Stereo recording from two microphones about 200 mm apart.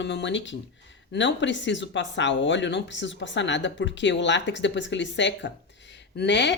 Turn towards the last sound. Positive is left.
turn(degrees=60)  # may be behind; listen again after turning